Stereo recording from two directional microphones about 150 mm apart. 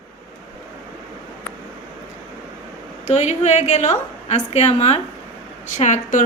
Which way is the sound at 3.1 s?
50° left (ahead or behind).